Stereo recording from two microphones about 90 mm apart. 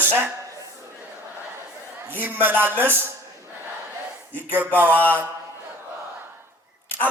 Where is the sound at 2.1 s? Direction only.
20° right (ahead or behind).